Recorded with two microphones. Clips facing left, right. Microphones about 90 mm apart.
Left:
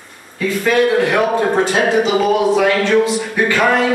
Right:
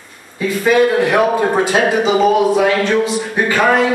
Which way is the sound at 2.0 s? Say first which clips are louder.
Right 2 dB; 20° right (ahead or behind).